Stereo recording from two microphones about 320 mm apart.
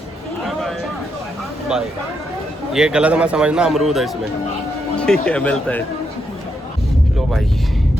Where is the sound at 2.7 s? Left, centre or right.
Centre.